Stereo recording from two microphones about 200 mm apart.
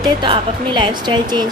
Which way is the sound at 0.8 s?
25° right (ahead or behind).